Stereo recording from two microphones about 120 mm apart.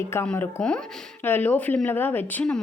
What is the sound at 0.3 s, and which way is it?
A woman's voice, 10° left (ahead or behind).